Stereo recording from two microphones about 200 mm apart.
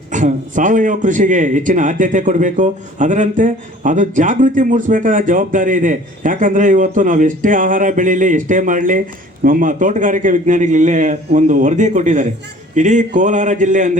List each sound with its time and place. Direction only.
0.1 s a man's voice: 40° right (ahead or behind)